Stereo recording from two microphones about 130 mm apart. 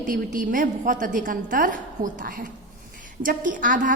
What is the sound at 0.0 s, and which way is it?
A woman's voice, 90° right.